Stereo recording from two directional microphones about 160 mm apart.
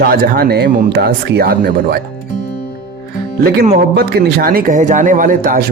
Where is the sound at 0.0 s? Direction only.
70° right (ahead or behind).